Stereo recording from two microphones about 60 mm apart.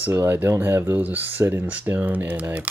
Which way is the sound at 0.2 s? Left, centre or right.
Right.